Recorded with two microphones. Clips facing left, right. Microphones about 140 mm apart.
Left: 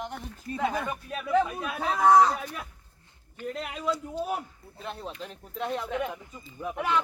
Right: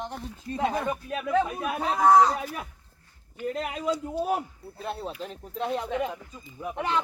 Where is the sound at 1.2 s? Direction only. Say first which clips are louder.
Left 1 dB; 15° right (ahead or behind).